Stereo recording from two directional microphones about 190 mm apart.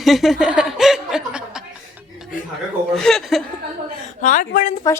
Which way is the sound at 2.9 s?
Centre (ahead or behind).